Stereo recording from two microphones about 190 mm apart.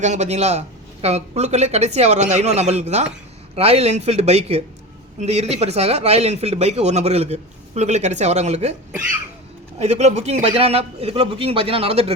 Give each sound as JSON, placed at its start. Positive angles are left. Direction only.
{"t": 0.0, "sound": "speech", "side_deg": -35}
{"t": 9.7, "sound": "speech", "side_deg": -35}